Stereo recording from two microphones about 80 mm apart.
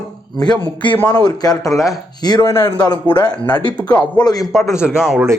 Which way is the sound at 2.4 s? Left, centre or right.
Left.